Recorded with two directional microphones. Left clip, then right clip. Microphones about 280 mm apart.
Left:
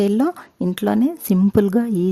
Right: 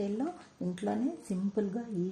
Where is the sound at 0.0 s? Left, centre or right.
Left.